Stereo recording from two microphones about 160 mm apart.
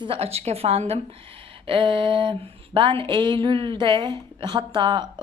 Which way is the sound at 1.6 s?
30° right (ahead or behind).